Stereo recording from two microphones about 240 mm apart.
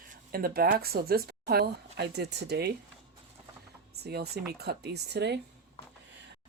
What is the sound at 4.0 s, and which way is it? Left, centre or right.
A woman's voice, right.